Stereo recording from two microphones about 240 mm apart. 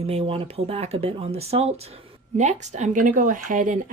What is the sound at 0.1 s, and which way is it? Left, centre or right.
Speech, right.